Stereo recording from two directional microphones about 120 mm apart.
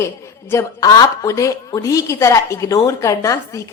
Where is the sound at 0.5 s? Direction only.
30° left (ahead or behind).